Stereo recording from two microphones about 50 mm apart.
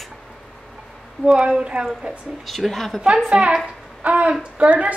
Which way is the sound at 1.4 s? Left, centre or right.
Centre.